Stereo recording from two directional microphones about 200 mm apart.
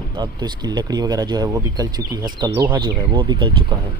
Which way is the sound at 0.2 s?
20° right (ahead or behind).